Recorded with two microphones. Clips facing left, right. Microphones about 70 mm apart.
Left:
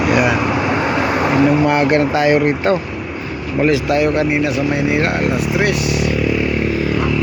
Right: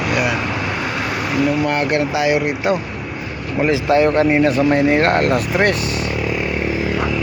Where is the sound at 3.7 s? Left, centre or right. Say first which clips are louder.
Right 1 dB; right.